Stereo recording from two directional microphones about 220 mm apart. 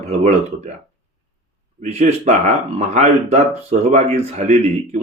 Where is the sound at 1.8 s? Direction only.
30° right (ahead or behind).